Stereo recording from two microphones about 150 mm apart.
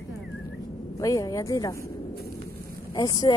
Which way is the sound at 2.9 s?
25° left (ahead or behind).